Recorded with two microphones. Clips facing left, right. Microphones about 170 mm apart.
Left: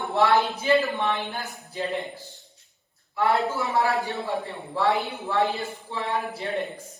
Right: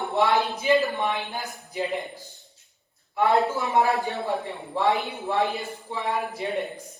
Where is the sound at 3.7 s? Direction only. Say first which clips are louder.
Right 2 dB; 20° right (ahead or behind).